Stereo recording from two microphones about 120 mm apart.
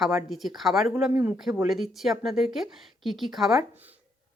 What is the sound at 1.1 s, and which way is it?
Speech, 20° right (ahead or behind).